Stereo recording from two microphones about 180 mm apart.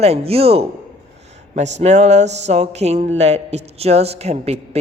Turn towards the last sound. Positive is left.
turn(degrees=-35)  # may be behind; listen again after turning